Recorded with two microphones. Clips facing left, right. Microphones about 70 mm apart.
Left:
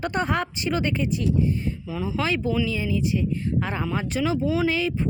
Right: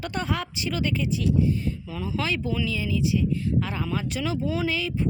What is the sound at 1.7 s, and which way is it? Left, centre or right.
Speech, centre.